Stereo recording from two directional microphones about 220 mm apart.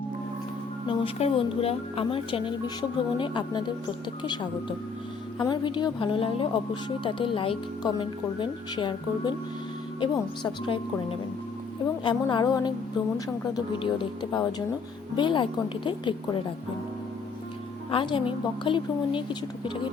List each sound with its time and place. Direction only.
0.9 s speech: 25° left (ahead or behind)
17.9 s speech: 20° left (ahead or behind)